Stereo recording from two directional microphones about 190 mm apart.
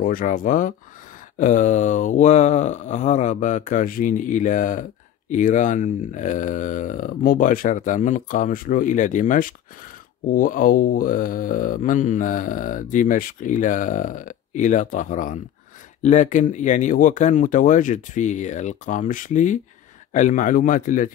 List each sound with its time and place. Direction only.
0.0 s speech: 50° left (ahead or behind)